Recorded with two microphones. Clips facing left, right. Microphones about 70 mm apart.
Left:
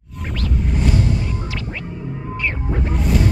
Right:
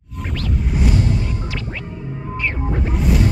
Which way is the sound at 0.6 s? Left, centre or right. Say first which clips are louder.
Even; centre.